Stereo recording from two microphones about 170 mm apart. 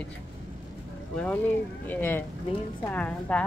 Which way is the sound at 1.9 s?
10° left (ahead or behind).